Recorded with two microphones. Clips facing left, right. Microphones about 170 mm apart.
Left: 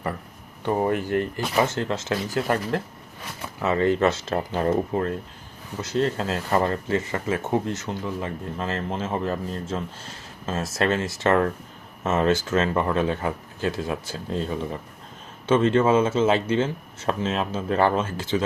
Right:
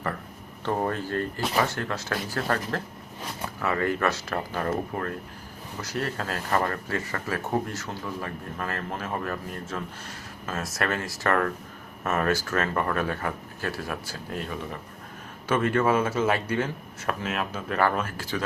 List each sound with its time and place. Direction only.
0.6 s speech: 15° left (ahead or behind)